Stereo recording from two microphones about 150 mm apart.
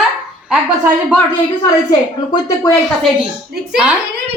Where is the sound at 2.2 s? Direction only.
25° left (ahead or behind).